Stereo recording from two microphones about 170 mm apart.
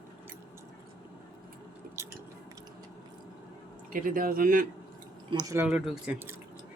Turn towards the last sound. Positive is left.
turn(degrees=-10)  # may be behind; listen again after turning